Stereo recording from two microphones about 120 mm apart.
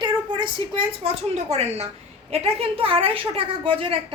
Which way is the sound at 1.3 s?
60° right (ahead or behind).